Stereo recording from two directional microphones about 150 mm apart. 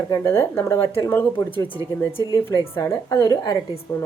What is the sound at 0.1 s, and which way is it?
A woman's voice, 15° left (ahead or behind).